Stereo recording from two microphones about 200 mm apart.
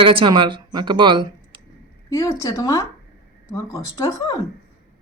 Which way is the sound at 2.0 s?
15° left (ahead or behind).